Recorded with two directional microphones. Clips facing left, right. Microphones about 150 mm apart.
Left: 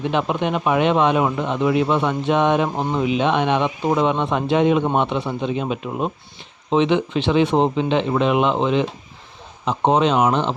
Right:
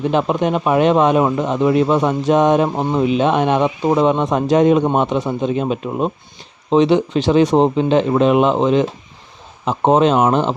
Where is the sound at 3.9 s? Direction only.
30° right (ahead or behind).